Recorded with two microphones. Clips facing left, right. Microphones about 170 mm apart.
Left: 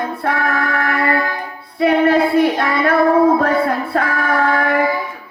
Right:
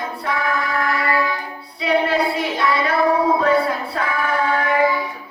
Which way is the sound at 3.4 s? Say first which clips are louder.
Left 1 dB; 55° left (ahead or behind).